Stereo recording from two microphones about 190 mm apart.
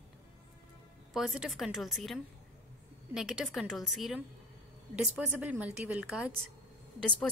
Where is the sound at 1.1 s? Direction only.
5° right (ahead or behind).